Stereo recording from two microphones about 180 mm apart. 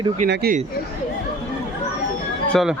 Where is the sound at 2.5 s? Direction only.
Centre (ahead or behind).